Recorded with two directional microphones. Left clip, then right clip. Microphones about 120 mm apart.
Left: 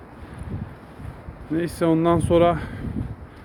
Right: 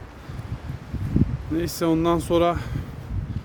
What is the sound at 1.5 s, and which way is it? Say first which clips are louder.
Speech: left 2 dB; 20° right (ahead or behind).